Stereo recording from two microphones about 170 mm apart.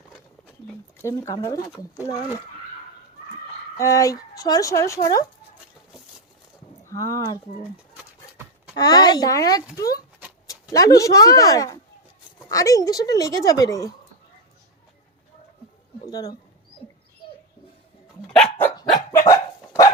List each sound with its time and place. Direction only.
1.0 s speech: 20° left (ahead or behind)
3.8 s speech: 20° left (ahead or behind)
6.8 s speech: 20° left (ahead or behind)
8.7 s speech: 25° left (ahead or behind)
16.0 s speech: 20° left (ahead or behind)
18.3 s dog: 5° left (ahead or behind)
18.9 s dog: 20° left (ahead or behind)